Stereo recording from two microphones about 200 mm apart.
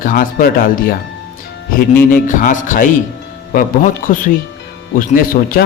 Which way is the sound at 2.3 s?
40° left (ahead or behind).